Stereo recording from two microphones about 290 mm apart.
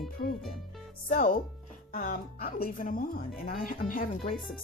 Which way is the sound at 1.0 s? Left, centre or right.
Left.